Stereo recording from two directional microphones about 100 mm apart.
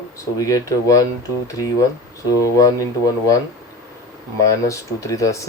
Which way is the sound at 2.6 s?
35° left (ahead or behind).